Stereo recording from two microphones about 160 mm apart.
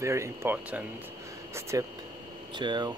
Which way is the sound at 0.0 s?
15° right (ahead or behind).